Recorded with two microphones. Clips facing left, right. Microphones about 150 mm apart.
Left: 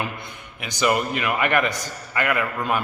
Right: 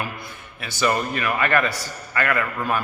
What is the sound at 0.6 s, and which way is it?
A man's voice, 15° left (ahead or behind).